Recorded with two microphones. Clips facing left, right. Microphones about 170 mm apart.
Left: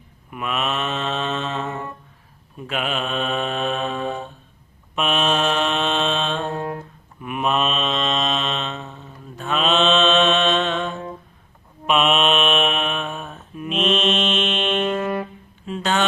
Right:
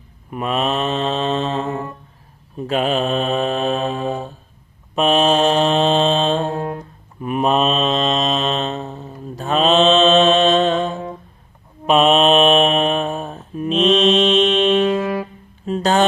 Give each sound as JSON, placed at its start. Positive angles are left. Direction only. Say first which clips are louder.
{"t": 0.3, "sound": "mantra", "louder": "right 5 dB", "side_deg": -35}
{"t": 7.2, "sound": "mantra", "louder": "right 5 dB", "side_deg": -35}
{"t": 14.3, "sound": "music", "louder": "right 8 dB", "side_deg": -35}
{"t": 14.9, "sound": "music", "louder": "right 3 dB", "side_deg": -10}
{"t": 15.6, "sound": "music", "louder": "right 6 dB", "side_deg": -40}